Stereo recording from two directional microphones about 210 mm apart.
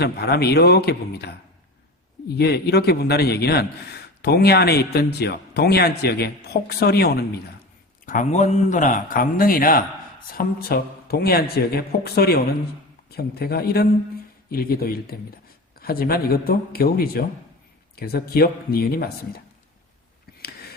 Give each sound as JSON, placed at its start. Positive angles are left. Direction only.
{"t": 0.0, "sound": "a man's voice", "side_deg": 50}
{"t": 8.0, "sound": "a man's voice", "side_deg": 35}